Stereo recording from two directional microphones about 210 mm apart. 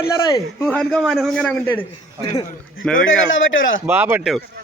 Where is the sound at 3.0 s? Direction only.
65° left (ahead or behind).